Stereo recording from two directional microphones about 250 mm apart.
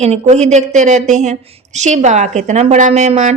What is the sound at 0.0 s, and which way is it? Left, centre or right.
Speech, right.